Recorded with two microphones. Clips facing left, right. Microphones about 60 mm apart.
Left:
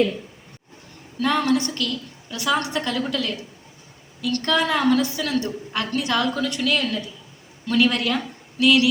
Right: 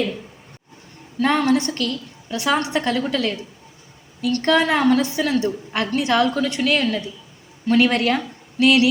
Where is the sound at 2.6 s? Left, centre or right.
Right.